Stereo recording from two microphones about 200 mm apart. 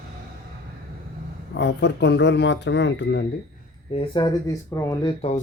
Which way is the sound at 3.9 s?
25° left (ahead or behind).